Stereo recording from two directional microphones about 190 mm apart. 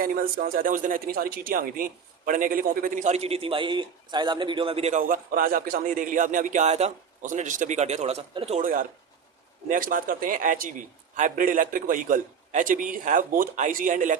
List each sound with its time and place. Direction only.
0.0 s speech: 50° right (ahead or behind)